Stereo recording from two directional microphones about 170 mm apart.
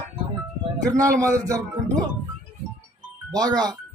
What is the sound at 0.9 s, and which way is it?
Speech, 20° right (ahead or behind).